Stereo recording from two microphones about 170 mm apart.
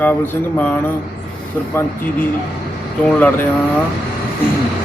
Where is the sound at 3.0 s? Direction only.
10° left (ahead or behind).